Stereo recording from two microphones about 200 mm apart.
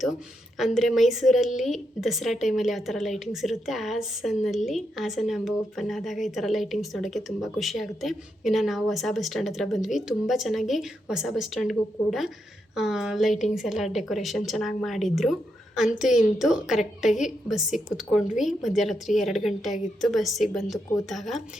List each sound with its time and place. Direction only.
0.5 s a woman's voice: centre (ahead or behind)